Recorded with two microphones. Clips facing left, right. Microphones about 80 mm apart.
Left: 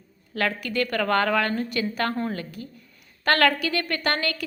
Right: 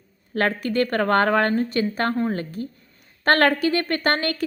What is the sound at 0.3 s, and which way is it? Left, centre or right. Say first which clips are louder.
A woman's voice: right 4 dB; right.